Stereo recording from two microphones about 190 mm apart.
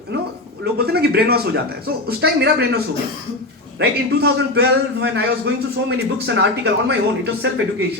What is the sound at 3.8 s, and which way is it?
A man's voice, 60° right (ahead or behind).